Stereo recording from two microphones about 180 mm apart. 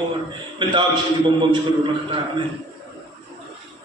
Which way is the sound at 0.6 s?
25° right (ahead or behind).